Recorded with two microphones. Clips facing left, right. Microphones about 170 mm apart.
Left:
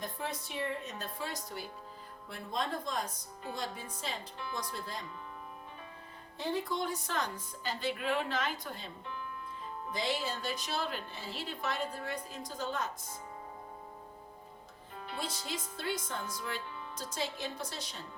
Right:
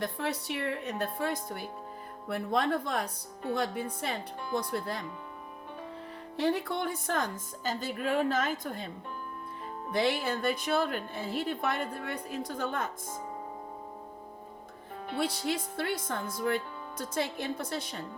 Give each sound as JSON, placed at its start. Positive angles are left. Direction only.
{"t": 0.0, "sound": "a woman's voice", "side_deg": -70}
{"t": 2.2, "sound": "a woman's voice", "side_deg": -65}
{"t": 6.3, "sound": "a woman's voice", "side_deg": -70}
{"t": 9.9, "sound": "a woman's voice", "side_deg": -60}
{"t": 15.0, "sound": "a woman's voice", "side_deg": -65}